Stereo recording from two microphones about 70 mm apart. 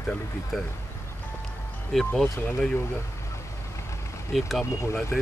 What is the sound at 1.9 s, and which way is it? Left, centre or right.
Speech, centre.